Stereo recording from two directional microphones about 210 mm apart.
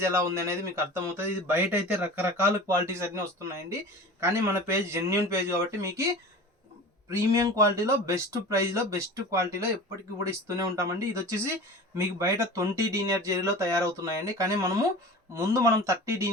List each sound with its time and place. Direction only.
0.0 s speech: 10° right (ahead or behind)
7.1 s speech: 15° right (ahead or behind)